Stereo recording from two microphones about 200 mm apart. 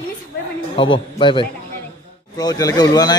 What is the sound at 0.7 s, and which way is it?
Speech, 25° left (ahead or behind).